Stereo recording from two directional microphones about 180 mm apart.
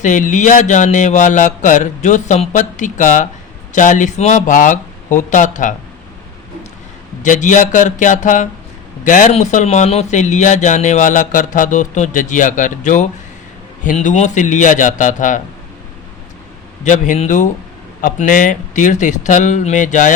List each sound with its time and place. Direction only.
0.0 s speech: 45° left (ahead or behind)
7.2 s speech: 45° left (ahead or behind)
16.8 s speech: 45° left (ahead or behind)